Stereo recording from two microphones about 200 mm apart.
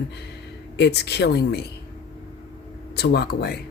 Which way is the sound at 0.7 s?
55° left (ahead or behind).